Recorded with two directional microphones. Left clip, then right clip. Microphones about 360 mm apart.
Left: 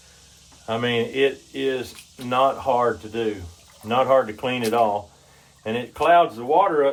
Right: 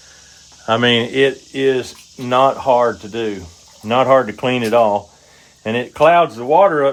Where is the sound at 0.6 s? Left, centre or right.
Right.